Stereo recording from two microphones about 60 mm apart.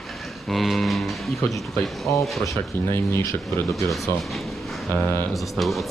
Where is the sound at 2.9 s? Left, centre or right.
Left.